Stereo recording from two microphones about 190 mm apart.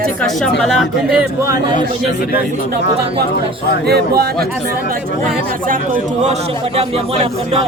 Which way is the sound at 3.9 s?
55° right (ahead or behind).